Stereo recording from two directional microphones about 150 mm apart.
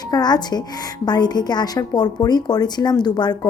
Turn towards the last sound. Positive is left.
turn(degrees=30)  # may be behind; listen again after turning